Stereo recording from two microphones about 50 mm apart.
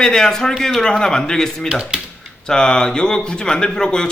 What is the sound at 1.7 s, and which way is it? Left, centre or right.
Speech, centre.